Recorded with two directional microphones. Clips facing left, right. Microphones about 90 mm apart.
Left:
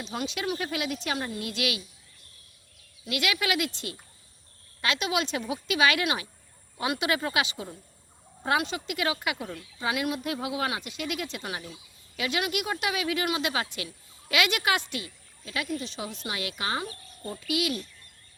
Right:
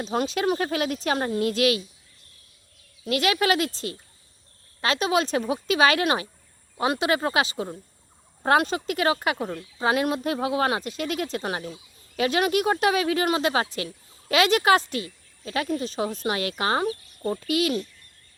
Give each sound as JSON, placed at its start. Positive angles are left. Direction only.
{"t": 0.0, "sound": "speech", "side_deg": -40}
{"t": 3.0, "sound": "speech", "side_deg": -35}